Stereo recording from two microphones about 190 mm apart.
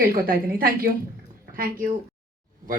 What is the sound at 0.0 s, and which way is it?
Speech, 50° right (ahead or behind).